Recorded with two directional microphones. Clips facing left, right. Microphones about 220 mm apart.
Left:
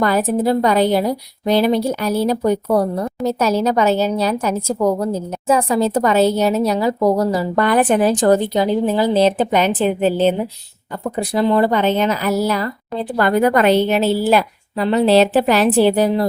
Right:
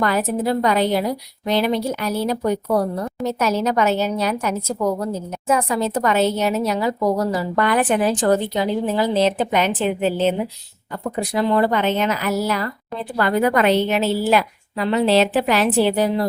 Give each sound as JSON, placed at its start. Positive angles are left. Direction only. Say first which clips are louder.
{"t": 0.0, "sound": "a woman's voice", "louder": "left 4 dB", "side_deg": 35}